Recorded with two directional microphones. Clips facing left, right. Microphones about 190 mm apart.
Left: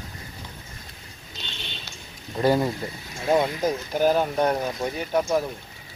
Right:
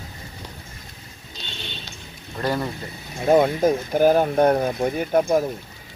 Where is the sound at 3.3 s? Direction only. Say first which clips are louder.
Right 5 dB; 50° right (ahead or behind).